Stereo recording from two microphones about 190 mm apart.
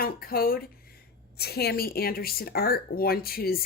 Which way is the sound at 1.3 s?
55° left (ahead or behind).